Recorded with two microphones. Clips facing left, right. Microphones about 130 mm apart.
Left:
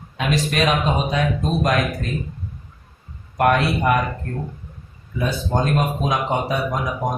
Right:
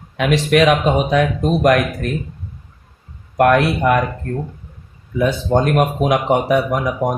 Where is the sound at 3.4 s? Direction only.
90° right.